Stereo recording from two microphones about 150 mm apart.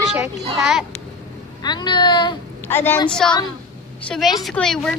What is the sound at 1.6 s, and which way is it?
Speech, 30° left (ahead or behind).